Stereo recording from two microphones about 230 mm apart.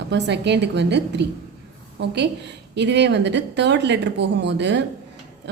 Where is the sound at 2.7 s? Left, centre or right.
Right.